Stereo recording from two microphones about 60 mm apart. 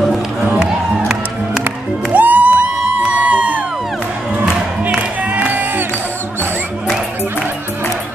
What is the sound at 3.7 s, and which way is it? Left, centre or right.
Music, centre.